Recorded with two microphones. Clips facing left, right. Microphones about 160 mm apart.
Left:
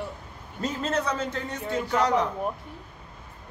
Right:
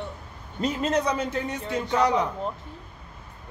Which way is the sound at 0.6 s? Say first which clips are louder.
Right 3 dB; 15° right (ahead or behind).